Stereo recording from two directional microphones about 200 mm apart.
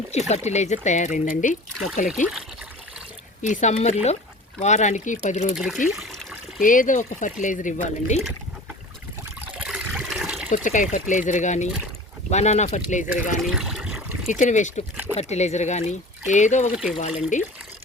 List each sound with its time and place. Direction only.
0.1 s speech: 35° left (ahead or behind)
3.4 s speech: 35° left (ahead or behind)
5.5 s speech: centre (ahead or behind)
6.0 s trickle: centre (ahead or behind)
6.6 s speech: 40° left (ahead or behind)
9.6 s water: 5° right (ahead or behind)
10.5 s speech: 40° left (ahead or behind)
13.4 s trickle: centre (ahead or behind)
14.3 s speech: 40° left (ahead or behind)
16.7 s speech: 5° right (ahead or behind)
17.0 s speech: 35° left (ahead or behind)